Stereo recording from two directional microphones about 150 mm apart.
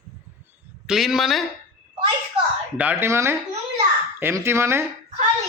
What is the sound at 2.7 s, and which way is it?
A man's voice, 15° right (ahead or behind).